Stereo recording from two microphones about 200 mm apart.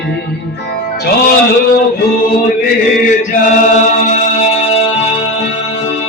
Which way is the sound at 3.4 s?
40° left (ahead or behind).